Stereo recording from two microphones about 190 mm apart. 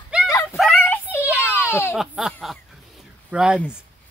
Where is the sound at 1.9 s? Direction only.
Centre (ahead or behind).